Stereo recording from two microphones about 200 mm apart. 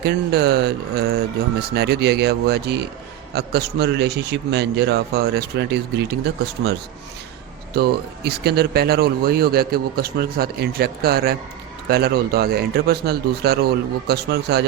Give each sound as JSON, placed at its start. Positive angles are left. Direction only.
{"t": 0.0, "sound": "a man's voice", "side_deg": -55}
{"t": 7.7, "sound": "speech", "side_deg": -55}